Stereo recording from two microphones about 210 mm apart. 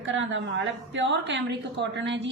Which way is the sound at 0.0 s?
65° right (ahead or behind).